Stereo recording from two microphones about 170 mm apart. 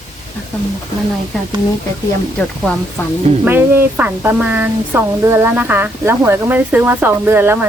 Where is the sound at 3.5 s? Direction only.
10° right (ahead or behind).